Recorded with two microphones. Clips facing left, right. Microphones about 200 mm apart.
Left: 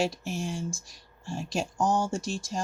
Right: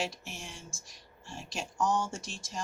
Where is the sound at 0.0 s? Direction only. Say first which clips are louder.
Left 9 dB; 35° left (ahead or behind).